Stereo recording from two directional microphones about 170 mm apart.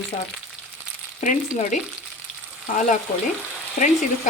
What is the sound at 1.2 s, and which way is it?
Speech, 50° left (ahead or behind).